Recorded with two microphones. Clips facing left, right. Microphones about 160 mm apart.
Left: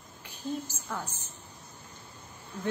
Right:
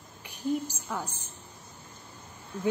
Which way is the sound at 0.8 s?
10° right (ahead or behind).